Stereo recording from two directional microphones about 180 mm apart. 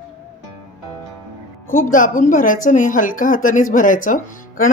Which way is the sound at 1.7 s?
50° left (ahead or behind).